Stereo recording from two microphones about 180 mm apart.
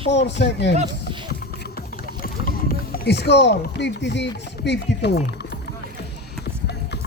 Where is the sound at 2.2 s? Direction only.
55° left (ahead or behind); by 5.1 s 70° left (ahead or behind).